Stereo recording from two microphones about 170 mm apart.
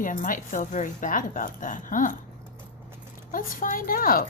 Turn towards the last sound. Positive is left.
turn(degrees=55)  # may be behind; listen again after turning